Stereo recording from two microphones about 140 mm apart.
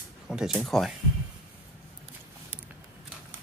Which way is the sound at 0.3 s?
Centre (ahead or behind).